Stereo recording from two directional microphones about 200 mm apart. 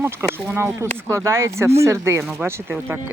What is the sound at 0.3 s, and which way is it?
Speech, 10° right (ahead or behind).